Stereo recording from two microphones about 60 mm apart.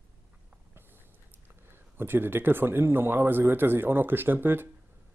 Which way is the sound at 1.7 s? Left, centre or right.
Right.